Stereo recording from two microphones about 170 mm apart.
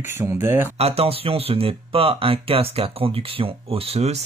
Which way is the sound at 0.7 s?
35° right (ahead or behind).